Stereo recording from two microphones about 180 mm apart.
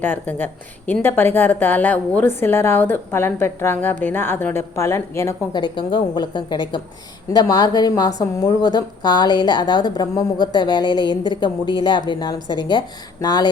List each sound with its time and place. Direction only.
0.0 s a woman's voice: 10° left (ahead or behind)